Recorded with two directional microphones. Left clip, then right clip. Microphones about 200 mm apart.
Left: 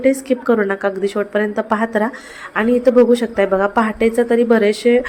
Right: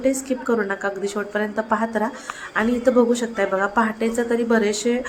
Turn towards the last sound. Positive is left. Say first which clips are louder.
# left 7 dB
turn(degrees=15)  # may be behind; listen again after turning